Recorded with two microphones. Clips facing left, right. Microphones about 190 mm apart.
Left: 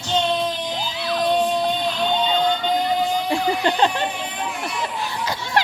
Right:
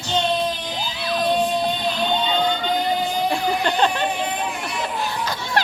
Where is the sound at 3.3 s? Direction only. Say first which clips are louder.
Left 1 dB; 25° left (ahead or behind).